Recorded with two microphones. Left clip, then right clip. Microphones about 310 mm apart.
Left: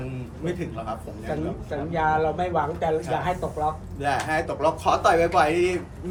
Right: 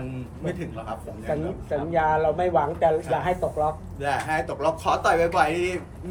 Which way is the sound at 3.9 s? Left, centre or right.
Centre.